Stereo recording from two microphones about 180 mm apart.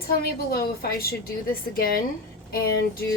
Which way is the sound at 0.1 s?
55° left (ahead or behind).